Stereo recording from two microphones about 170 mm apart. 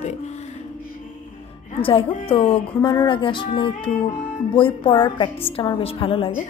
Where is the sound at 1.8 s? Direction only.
30° left (ahead or behind).